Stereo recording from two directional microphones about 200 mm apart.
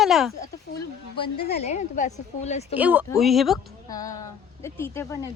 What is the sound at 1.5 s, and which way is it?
A woman's voice, 35° left (ahead or behind).